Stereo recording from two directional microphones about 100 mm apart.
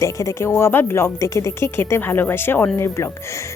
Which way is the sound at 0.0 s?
30° left (ahead or behind).